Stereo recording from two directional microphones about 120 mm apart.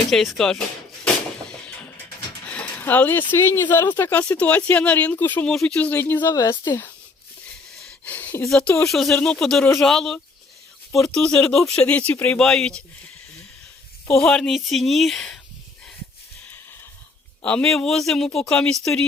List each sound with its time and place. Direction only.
0.1 s speech: centre (ahead or behind)
1.6 s speech: 10° left (ahead or behind)
7.9 s a sound: 15° left (ahead or behind)
8.4 s speech: 5° left (ahead or behind)
14.2 s speech: 5° left (ahead or behind)
17.4 s speech: 5° left (ahead or behind)